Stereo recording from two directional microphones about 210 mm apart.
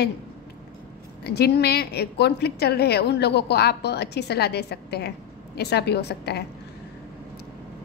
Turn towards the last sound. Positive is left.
turn(degrees=50)  # may be behind; listen again after turning